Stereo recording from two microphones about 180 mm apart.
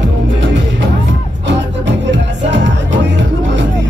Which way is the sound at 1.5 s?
80° right.